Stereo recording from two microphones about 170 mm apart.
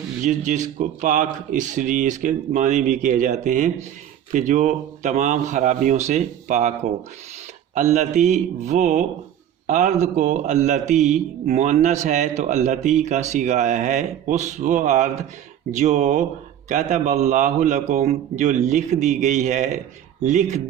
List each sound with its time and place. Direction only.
0.3 s speech: 45° right (ahead or behind)
7.8 s speech: 45° right (ahead or behind)